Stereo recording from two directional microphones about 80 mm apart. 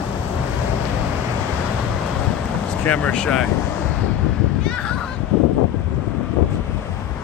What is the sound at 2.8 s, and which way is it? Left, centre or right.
Speech, centre.